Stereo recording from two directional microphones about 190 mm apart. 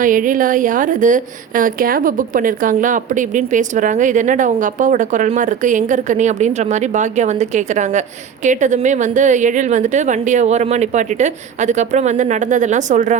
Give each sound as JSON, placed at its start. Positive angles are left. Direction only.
{"t": 0.0, "sound": "a woman's voice", "side_deg": -45}